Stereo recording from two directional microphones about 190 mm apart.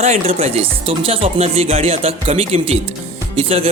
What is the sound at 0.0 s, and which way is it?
Speech, 35° right (ahead or behind).